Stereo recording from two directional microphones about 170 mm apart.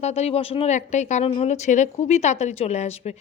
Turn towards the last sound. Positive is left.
turn(degrees=40)  # may be behind; listen again after turning